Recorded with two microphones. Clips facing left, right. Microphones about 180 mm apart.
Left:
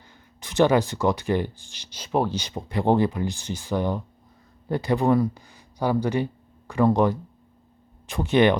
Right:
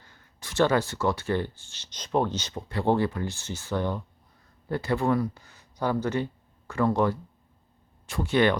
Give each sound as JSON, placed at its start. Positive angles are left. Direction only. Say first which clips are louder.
{"t": 0.0, "sound": "speech", "louder": "left 2 dB", "side_deg": 15}